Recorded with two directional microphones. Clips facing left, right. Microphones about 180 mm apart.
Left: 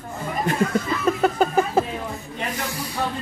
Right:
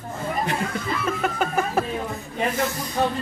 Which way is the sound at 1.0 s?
35° left (ahead or behind).